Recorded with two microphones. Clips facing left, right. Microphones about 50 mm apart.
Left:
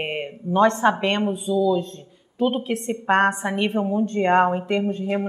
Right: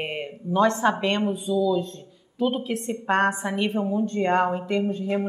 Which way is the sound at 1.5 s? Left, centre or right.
Centre.